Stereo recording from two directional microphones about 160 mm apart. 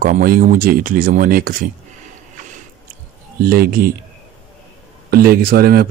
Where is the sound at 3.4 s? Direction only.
70° right (ahead or behind).